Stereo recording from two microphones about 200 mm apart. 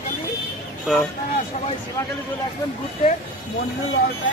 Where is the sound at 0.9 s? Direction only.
Centre (ahead or behind).